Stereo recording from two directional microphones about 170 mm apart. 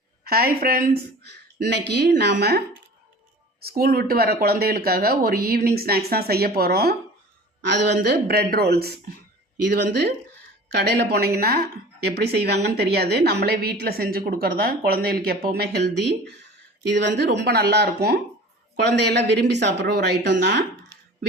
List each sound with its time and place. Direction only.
0.3 s speech: 60° right (ahead or behind)
3.6 s speech: 60° right (ahead or behind)
7.6 s speech: 80° right
9.6 s speech: 80° right
18.9 s speech: 80° right